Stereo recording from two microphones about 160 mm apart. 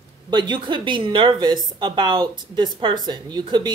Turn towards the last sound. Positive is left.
turn(degrees=-25)  # may be behind; listen again after turning